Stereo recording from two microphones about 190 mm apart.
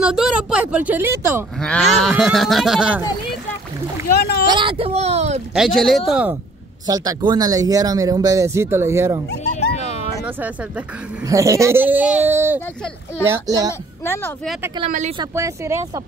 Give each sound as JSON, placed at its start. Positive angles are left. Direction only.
{"t": 0.0, "sound": "speech", "side_deg": -5}
{"t": 1.6, "sound": "speech", "side_deg": 5}
{"t": 4.2, "sound": "speech", "side_deg": 55}
{"t": 4.6, "sound": "speech", "side_deg": -30}
{"t": 5.5, "sound": "speech", "side_deg": 0}
{"t": 6.9, "sound": "speech", "side_deg": -20}
{"t": 9.4, "sound": "a sound", "side_deg": 35}
{"t": 11.2, "sound": "a child's voice", "side_deg": -15}
{"t": 14.0, "sound": "speech", "side_deg": 10}
{"t": 14.9, "sound": "speech", "side_deg": -40}
{"t": 15.3, "sound": "speech", "side_deg": -15}